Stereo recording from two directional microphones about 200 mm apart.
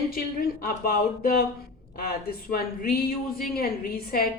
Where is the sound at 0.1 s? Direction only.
45° left (ahead or behind).